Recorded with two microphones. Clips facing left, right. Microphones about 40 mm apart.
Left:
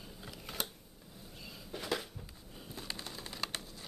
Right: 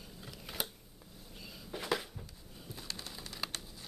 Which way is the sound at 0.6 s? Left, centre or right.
Centre.